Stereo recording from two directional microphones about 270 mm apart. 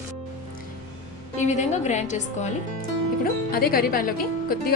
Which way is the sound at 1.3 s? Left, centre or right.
Left.